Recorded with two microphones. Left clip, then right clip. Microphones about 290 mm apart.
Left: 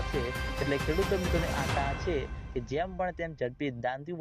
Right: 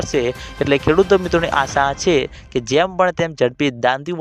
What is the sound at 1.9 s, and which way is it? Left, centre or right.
Speech, right.